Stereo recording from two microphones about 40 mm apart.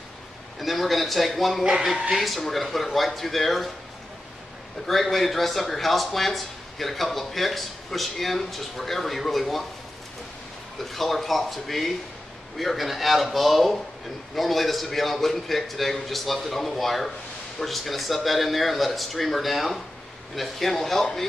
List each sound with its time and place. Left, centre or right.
0.6 s speech: centre
1.6 s speech: centre
2.1 s speech: centre
4.8 s speech: centre
10.8 s speech: centre